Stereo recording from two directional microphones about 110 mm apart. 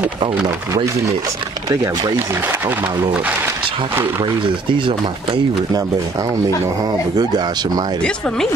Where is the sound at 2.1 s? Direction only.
20° right (ahead or behind).